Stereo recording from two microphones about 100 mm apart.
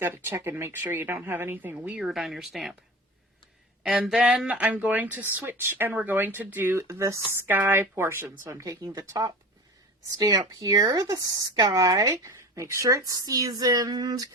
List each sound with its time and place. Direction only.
0.0 s speech: 20° right (ahead or behind)
2.0 s speech: 5° right (ahead or behind)
3.8 s speech: 5° right (ahead or behind); by 14.3 s 40° right (ahead or behind)